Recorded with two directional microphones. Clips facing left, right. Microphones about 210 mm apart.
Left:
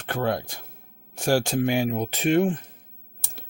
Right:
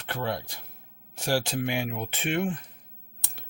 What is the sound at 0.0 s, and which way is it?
Speech, 50° left (ahead or behind).